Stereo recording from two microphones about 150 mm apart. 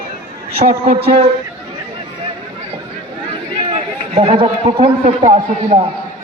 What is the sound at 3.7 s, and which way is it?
A man's voice, 45° right (ahead or behind).